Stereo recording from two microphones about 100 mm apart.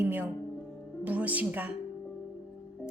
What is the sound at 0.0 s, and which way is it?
A woman's voice, 15° right (ahead or behind).